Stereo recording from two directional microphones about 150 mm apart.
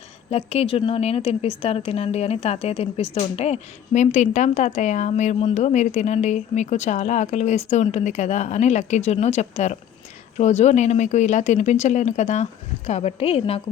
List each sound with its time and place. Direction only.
0.3 s speech: 40° left (ahead or behind)